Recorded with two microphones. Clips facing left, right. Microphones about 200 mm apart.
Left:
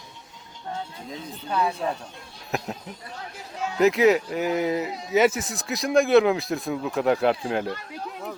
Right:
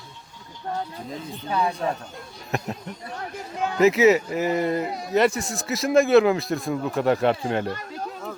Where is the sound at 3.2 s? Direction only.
60° right (ahead or behind).